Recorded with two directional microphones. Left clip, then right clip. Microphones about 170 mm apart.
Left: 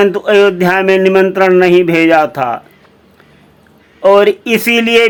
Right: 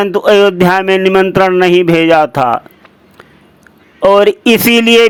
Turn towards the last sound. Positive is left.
turn(degrees=-35)  # may be behind; listen again after turning